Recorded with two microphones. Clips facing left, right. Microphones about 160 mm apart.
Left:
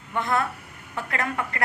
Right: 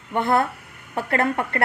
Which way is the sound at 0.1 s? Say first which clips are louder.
Right 5 dB; 30° right (ahead or behind).